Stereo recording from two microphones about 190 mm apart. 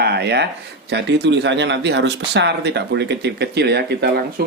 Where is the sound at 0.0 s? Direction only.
60° right (ahead or behind).